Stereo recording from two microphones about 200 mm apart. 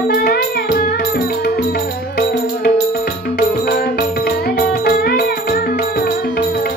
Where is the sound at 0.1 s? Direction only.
50° left (ahead or behind).